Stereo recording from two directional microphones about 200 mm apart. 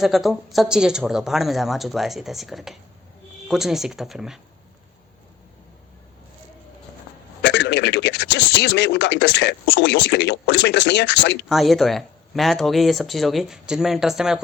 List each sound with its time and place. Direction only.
0.0 s speech: centre (ahead or behind)
7.4 s speech: 60° left (ahead or behind)
11.4 s speech: centre (ahead or behind)